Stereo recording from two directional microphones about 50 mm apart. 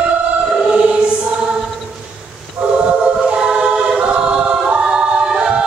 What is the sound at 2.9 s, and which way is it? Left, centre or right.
Choir, right.